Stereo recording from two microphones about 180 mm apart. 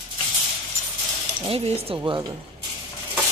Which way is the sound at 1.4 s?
35° right (ahead or behind).